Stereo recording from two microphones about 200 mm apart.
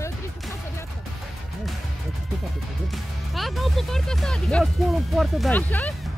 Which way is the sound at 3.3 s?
Centre (ahead or behind).